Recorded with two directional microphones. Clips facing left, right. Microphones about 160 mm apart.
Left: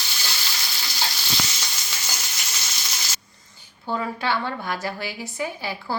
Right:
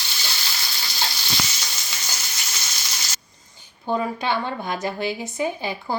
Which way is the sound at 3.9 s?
20° right (ahead or behind).